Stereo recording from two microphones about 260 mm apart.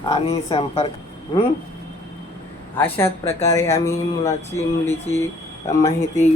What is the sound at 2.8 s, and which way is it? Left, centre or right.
Speech, centre.